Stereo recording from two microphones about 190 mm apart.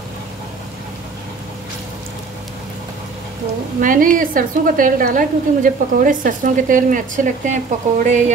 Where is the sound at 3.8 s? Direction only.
45° right (ahead or behind).